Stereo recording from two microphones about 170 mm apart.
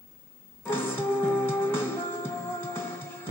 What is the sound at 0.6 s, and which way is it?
Music, 15° left (ahead or behind).